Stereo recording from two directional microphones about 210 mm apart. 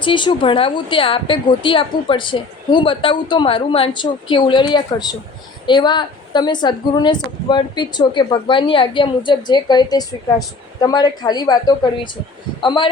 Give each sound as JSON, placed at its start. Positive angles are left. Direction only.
{"t": 0.0, "sound": "a woman's voice", "side_deg": 20}
{"t": 12.6, "sound": "a woman's voice", "side_deg": 20}